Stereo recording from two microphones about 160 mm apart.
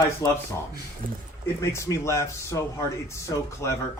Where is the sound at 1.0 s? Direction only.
60° right (ahead or behind).